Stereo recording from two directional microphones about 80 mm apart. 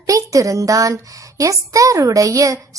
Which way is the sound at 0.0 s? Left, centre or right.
Right.